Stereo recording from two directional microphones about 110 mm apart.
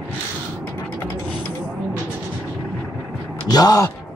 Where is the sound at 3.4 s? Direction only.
35° left (ahead or behind).